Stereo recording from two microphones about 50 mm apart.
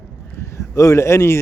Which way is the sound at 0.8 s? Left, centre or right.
Left.